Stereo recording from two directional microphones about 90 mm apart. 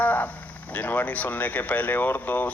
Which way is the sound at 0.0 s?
20° left (ahead or behind).